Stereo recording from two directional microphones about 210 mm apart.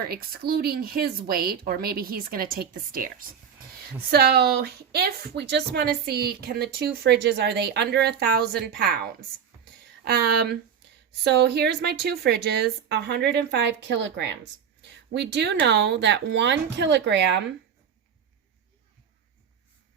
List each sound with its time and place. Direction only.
0.1 s a woman's voice: 45° right (ahead or behind)